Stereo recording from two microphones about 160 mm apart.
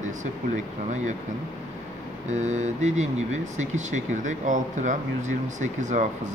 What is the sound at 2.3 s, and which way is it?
Speech, 45° right (ahead or behind).